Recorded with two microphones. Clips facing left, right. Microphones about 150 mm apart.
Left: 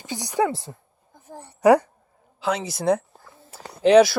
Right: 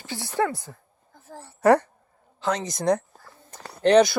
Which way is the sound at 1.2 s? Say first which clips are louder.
Left 2 dB; 15° left (ahead or behind).